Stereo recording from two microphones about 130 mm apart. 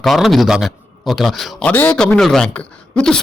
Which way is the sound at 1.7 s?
10° left (ahead or behind).